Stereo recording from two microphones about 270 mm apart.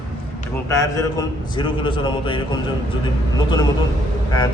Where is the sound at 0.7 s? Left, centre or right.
Centre.